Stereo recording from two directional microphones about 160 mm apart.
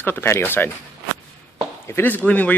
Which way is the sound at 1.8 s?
15° left (ahead or behind).